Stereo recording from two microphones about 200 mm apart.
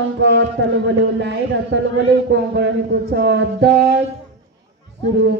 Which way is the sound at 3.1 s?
60° right (ahead or behind).